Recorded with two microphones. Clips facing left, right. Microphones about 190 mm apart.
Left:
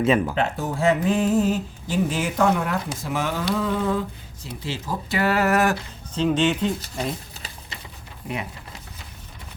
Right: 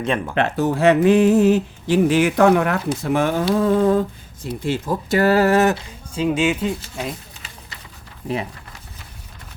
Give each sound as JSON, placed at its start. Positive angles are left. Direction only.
{"t": 0.0, "sound": "speech", "side_deg": 5}
{"t": 0.3, "sound": "speech", "side_deg": -75}
{"t": 6.1, "sound": "speech", "side_deg": -10}